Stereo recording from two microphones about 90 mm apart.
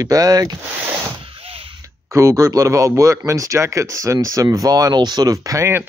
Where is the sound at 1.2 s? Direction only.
90° right.